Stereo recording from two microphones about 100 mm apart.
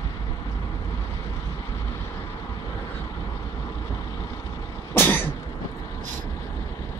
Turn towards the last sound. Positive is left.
turn(degrees=20)  # may be behind; listen again after turning